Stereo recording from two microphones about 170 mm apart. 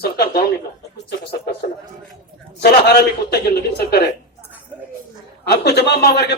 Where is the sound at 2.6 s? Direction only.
70° left (ahead or behind).